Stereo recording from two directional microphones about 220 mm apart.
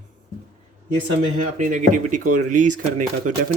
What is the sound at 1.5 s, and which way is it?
Speech, 35° right (ahead or behind).